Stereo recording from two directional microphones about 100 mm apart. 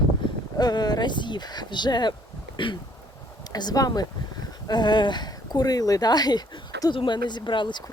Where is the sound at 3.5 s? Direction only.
40° left (ahead or behind).